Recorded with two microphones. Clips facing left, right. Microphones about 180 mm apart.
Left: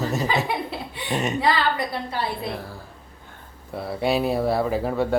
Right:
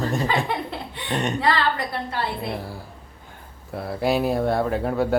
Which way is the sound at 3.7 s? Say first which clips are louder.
Even; centre (ahead or behind).